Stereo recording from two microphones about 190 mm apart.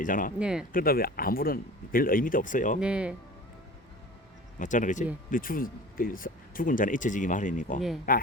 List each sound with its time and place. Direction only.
0.0 s speech: 45° left (ahead or behind)
0.3 s speech: 5° right (ahead or behind)
0.7 s speech: 50° left (ahead or behind)
2.8 s speech: 5° right (ahead or behind)
4.6 s speech: 40° left (ahead or behind)